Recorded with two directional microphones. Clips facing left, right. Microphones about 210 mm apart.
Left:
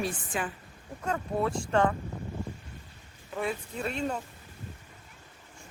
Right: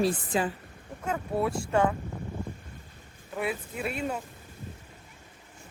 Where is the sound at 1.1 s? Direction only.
5° right (ahead or behind).